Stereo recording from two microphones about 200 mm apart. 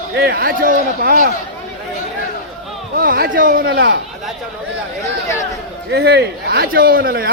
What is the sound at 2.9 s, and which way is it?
A man's voice, 45° right (ahead or behind).